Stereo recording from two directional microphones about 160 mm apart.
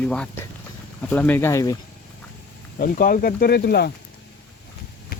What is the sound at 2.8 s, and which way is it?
Speech, 60° left (ahead or behind).